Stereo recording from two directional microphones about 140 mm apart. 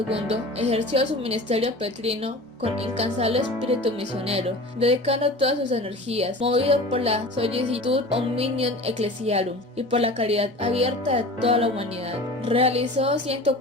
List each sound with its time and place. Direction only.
0.1 s music: 45° right (ahead or behind)